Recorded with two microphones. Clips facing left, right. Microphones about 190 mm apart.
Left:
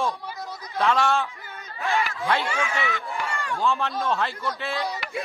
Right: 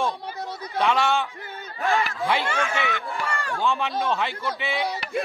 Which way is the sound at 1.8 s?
35° right (ahead or behind).